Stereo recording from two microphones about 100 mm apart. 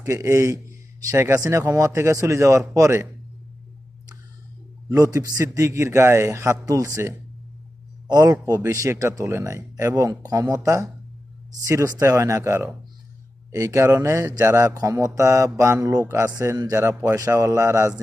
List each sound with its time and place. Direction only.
0.0 s a man's voice: 30° right (ahead or behind)
4.9 s speech: 35° right (ahead or behind)